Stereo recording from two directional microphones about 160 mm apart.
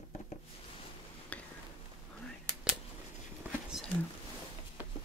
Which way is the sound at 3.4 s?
5° right (ahead or behind).